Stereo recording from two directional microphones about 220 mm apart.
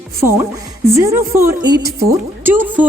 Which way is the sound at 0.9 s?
10° right (ahead or behind).